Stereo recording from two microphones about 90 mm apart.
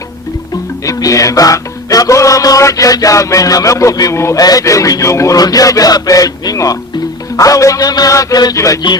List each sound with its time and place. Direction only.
0.9 s speech: 40° left (ahead or behind)
4.4 s speech: 40° left (ahead or behind)